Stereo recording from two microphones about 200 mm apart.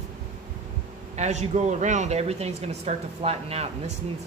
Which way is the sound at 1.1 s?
35° right (ahead or behind).